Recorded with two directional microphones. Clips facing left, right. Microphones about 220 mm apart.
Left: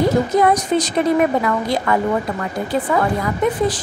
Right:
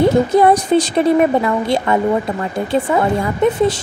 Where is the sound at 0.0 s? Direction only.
30° right (ahead or behind).